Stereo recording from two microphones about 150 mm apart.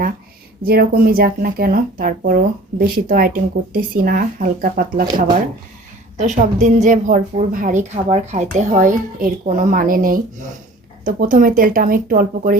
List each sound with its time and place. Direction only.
0.6 s speech: 90° right; by 5.0 s 70° right (ahead or behind)
6.1 s a woman's voice: 55° right (ahead or behind)